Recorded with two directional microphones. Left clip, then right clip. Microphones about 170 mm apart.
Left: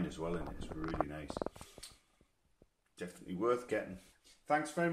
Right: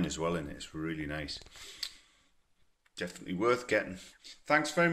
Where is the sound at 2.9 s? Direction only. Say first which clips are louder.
Right 6 dB; 10° right (ahead or behind).